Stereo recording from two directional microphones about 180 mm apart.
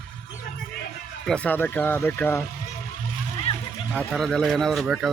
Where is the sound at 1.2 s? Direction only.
5° left (ahead or behind).